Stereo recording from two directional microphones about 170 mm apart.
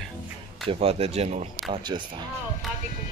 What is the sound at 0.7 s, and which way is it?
Speech, 35° right (ahead or behind).